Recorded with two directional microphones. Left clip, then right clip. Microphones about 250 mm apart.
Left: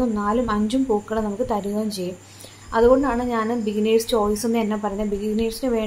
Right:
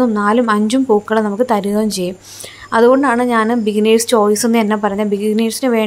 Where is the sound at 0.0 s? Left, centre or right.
Right.